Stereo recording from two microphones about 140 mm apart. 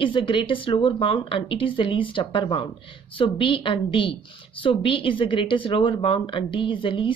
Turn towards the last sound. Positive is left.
turn(degrees=35)  # may be behind; listen again after turning